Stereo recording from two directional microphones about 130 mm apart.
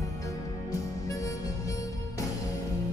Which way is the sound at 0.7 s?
25° left (ahead or behind).